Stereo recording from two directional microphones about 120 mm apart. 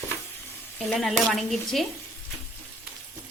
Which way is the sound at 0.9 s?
Centre (ahead or behind).